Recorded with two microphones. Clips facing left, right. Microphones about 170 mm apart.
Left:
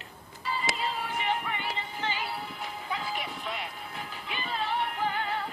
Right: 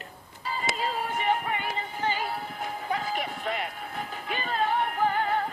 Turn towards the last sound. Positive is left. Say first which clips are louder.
# right 5 dB
turn(degrees=-50)  # may be behind; listen again after turning